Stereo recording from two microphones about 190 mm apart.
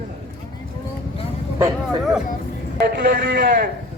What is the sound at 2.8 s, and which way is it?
Speech, 60° right (ahead or behind).